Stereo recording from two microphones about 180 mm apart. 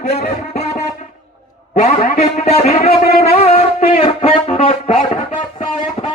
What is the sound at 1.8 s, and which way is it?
A man's voice, 40° left (ahead or behind).